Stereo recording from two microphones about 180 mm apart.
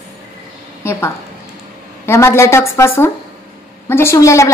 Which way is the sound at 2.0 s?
15° left (ahead or behind).